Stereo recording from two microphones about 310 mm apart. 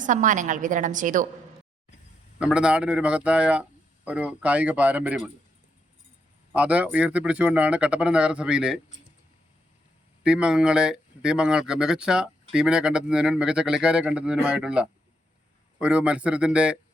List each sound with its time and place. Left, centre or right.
0.0 s a woman's voice: right
2.4 s speech: centre
6.5 s speech: centre
10.2 s speech: centre